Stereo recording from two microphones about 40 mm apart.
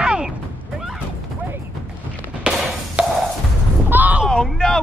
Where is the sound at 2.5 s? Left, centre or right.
Right.